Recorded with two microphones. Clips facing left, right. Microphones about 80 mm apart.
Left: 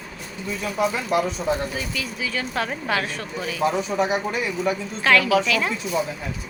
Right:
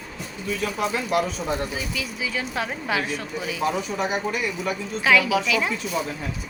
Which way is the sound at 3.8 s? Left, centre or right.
Left.